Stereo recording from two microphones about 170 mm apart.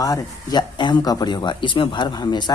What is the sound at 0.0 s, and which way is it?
Speech, 20° left (ahead or behind).